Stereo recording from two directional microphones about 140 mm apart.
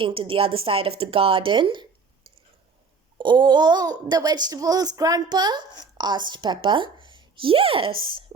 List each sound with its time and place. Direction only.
0.0 s speech: 40° right (ahead or behind)
3.2 s a child's voice: 35° right (ahead or behind)